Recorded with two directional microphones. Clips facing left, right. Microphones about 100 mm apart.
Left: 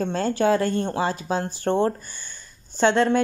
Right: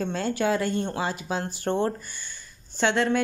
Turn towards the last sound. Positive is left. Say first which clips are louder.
# left 4 dB
turn(degrees=40)  # may be behind; listen again after turning